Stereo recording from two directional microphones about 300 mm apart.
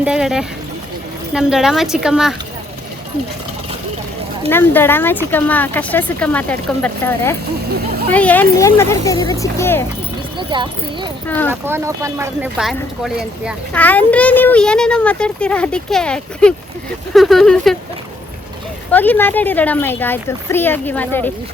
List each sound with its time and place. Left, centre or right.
0.0 s speech: centre
4.4 s speech: centre
10.3 s speech: centre
11.3 s speech: centre
11.6 s speech: centre
18.9 s speech: centre